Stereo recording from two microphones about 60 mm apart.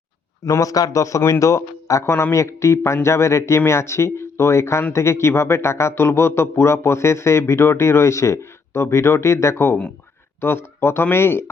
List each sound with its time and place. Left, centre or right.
0.5 s a man's voice: left